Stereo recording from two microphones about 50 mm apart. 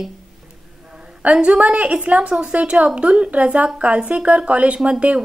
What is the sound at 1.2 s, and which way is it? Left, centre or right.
A woman's voice, centre.